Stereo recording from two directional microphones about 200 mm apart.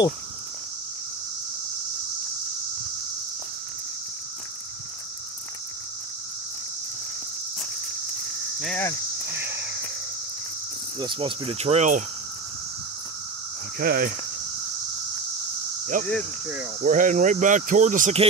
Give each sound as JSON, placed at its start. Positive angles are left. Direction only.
{"t": 8.5, "sound": "speech", "side_deg": 0}
{"t": 9.4, "sound": "a sound", "side_deg": -10}
{"t": 11.0, "sound": "cricket", "side_deg": -25}
{"t": 13.7, "sound": "speech", "side_deg": -50}
{"t": 16.1, "sound": "speech", "side_deg": -5}
{"t": 16.8, "sound": "speech", "side_deg": -40}